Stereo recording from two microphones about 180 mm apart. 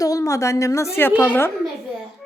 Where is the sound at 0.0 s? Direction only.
20° left (ahead or behind).